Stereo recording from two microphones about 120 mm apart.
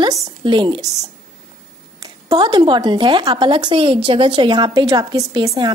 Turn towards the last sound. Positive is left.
turn(degrees=-30)  # may be behind; listen again after turning